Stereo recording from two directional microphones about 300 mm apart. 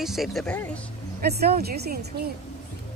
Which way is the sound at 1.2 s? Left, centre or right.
Right.